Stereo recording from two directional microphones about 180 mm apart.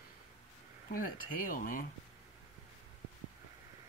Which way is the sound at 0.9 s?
50° left (ahead or behind).